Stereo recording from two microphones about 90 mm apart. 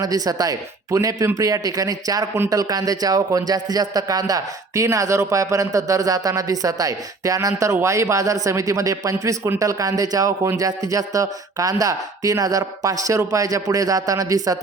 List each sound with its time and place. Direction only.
0.0 s a man's voice: 45° right (ahead or behind)